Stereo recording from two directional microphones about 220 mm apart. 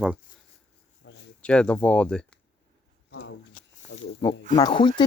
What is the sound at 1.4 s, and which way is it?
Speech, 5° left (ahead or behind).